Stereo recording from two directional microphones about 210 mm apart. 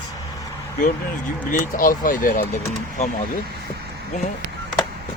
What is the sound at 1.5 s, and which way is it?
Speech, 40° left (ahead or behind).